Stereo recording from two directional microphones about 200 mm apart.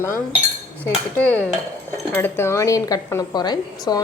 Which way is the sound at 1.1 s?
10° left (ahead or behind).